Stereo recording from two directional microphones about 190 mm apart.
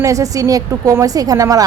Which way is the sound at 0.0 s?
15° right (ahead or behind).